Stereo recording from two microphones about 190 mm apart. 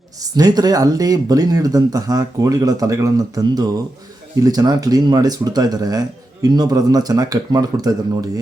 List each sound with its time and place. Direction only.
0.3 s speech: 20° right (ahead or behind)